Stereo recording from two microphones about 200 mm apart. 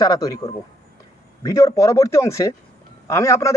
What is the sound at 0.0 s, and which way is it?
A man's voice, 15° left (ahead or behind).